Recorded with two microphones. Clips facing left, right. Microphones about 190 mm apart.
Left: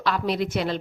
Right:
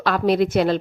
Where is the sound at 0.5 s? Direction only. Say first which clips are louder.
Right 7 dB; 55° right (ahead or behind).